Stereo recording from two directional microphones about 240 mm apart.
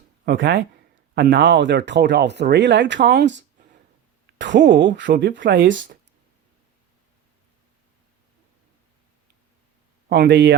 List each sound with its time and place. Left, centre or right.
0.3 s speech: right
4.4 s speech: right
10.1 s speech: right